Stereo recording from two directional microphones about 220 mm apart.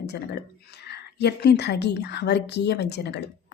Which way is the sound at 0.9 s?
50° left (ahead or behind).